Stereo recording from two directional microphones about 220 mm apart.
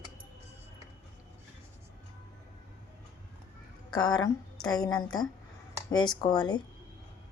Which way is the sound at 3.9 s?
20° left (ahead or behind).